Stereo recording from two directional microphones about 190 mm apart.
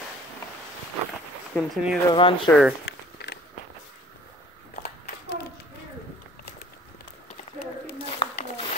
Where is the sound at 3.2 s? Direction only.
65° left (ahead or behind).